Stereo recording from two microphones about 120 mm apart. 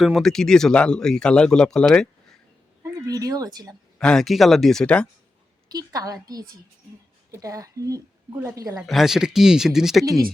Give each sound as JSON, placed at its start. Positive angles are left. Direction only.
{"t": 0.0, "sound": "speech", "side_deg": 0}
{"t": 3.1, "sound": "speech", "side_deg": -30}
{"t": 3.9, "sound": "speech", "side_deg": 5}
{"t": 5.7, "sound": "a woman's voice", "side_deg": -30}
{"t": 8.9, "sound": "speech", "side_deg": 0}